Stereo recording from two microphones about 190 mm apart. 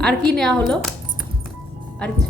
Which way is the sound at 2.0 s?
5° left (ahead or behind).